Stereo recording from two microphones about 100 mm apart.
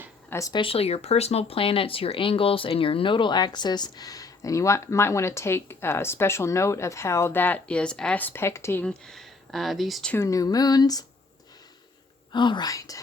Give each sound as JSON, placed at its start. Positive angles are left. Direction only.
{"t": 0.3, "sound": "speech", "side_deg": 30}
{"t": 0.5, "sound": "speech", "side_deg": 65}
{"t": 8.8, "sound": "speech", "side_deg": 10}
{"t": 10.2, "sound": "speech", "side_deg": 35}
{"t": 12.3, "sound": "speech", "side_deg": 50}